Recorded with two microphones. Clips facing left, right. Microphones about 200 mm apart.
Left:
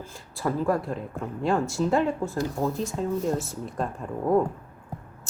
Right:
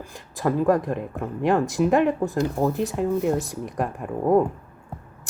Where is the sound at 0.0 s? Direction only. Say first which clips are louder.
Right 4 dB; 15° right (ahead or behind).